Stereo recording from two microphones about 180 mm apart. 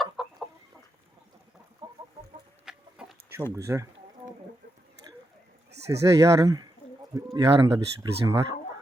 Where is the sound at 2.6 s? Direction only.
5° right (ahead or behind).